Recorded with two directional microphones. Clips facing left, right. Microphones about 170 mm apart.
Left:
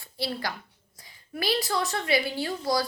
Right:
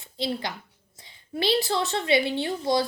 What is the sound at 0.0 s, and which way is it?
A woman's voice, 20° right (ahead or behind).